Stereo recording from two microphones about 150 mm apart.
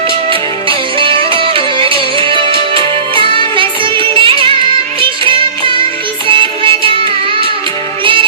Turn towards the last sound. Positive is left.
turn(degrees=-35)  # may be behind; listen again after turning